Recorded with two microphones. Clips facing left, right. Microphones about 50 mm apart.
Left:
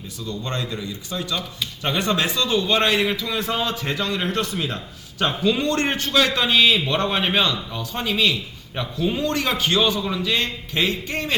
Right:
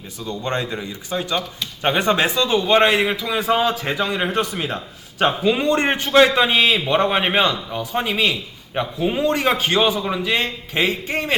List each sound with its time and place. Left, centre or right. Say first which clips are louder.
0.3 s a man's voice: right 4 dB; right